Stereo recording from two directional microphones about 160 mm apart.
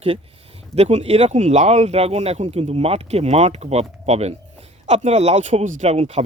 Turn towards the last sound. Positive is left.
turn(degrees=-45)  # may be behind; listen again after turning